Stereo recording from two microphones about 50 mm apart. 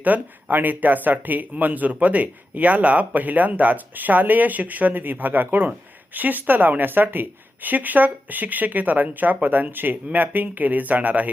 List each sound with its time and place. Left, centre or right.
0.0 s speech: right